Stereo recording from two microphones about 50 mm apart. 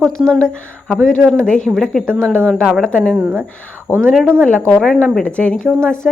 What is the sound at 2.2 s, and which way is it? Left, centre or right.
Speech, centre.